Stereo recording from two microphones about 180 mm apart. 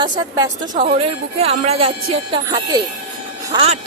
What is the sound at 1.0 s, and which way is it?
Speech, 35° right (ahead or behind).